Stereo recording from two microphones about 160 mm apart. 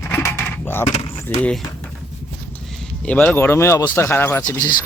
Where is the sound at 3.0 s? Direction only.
10° left (ahead or behind).